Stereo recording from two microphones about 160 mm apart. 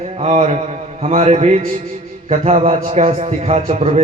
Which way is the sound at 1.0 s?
45° right (ahead or behind).